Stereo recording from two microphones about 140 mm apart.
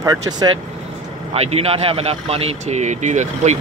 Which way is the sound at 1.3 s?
45° right (ahead or behind).